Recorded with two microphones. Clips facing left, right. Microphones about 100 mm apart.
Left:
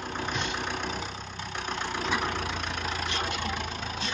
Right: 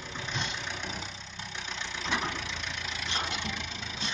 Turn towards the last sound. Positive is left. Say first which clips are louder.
# left 3 dB
turn(degrees=45)  # may be behind; listen again after turning